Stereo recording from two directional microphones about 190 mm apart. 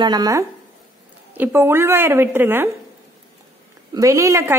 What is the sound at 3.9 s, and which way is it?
Speech, 15° right (ahead or behind).